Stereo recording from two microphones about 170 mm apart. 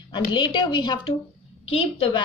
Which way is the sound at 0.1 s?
30° left (ahead or behind).